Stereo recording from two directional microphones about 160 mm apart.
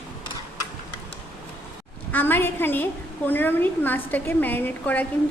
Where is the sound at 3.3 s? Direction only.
10° left (ahead or behind).